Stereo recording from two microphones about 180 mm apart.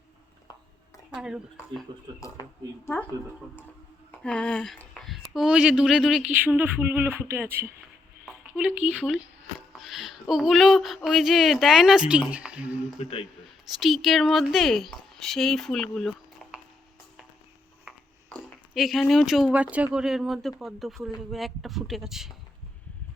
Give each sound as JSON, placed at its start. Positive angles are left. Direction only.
{"t": 1.1, "sound": "speech", "side_deg": -5}
{"t": 1.9, "sound": "speech", "side_deg": -30}
{"t": 2.2, "sound": "speech", "side_deg": 15}
{"t": 4.1, "sound": "speech", "side_deg": 5}
{"t": 8.2, "sound": "a sound", "side_deg": -5}
{"t": 8.8, "sound": "speech", "side_deg": -10}
{"t": 13.0, "sound": "a man's voice", "side_deg": 30}
{"t": 13.7, "sound": "speech", "side_deg": 0}
{"t": 17.9, "sound": "a sound", "side_deg": -5}
{"t": 18.7, "sound": "speech", "side_deg": 0}